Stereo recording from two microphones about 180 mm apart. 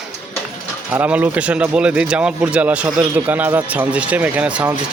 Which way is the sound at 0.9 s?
10° right (ahead or behind).